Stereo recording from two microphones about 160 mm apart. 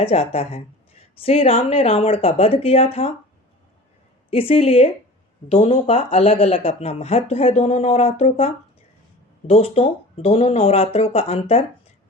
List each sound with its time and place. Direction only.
0.0 s speech: 40° left (ahead or behind)
4.3 s speech: 40° left (ahead or behind)